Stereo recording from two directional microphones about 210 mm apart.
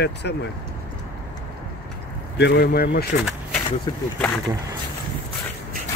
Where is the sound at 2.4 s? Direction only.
50° left (ahead or behind).